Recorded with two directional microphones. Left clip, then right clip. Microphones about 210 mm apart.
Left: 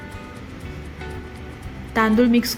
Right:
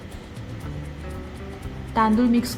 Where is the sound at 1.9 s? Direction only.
10° left (ahead or behind).